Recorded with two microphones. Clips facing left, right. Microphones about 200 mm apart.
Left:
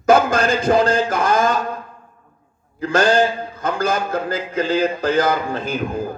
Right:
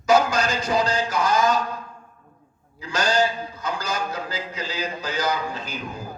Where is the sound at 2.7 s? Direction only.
55° left (ahead or behind).